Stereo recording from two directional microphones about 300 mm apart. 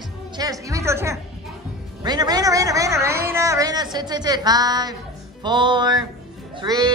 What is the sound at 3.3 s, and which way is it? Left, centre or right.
A woman's voice, centre.